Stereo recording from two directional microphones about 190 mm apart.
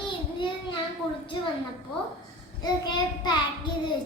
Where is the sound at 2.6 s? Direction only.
20° left (ahead or behind).